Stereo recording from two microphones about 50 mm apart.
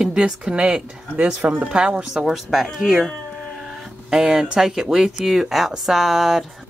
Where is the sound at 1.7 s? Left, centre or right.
Centre.